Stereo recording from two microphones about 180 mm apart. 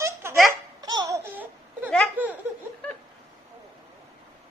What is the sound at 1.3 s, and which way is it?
Baby cry, 10° right (ahead or behind).